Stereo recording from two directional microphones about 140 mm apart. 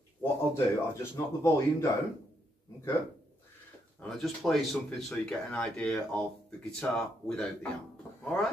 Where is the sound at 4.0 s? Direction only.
5° left (ahead or behind).